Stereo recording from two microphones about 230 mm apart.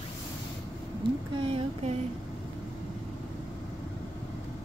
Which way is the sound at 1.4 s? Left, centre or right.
Right.